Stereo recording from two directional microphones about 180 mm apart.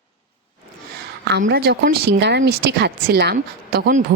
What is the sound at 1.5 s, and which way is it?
A woman's voice, 60° right (ahead or behind).